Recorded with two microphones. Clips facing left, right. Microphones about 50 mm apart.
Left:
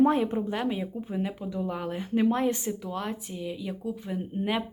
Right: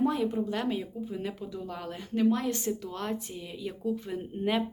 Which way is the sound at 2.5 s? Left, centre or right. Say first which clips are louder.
Left 1 dB; centre.